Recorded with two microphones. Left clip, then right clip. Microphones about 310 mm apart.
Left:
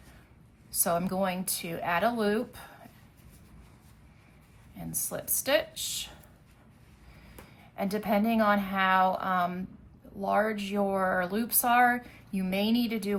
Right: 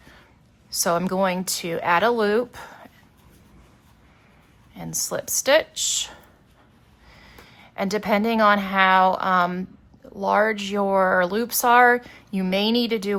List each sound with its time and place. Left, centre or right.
0.7 s speech: right
4.8 s speech: centre
7.8 s speech: right